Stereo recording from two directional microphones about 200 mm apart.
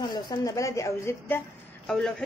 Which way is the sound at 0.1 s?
20° left (ahead or behind).